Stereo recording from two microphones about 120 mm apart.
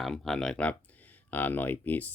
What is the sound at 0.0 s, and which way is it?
Speech, 5° left (ahead or behind).